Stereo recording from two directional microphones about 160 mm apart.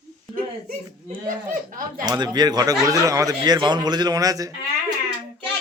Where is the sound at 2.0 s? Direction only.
25° right (ahead or behind).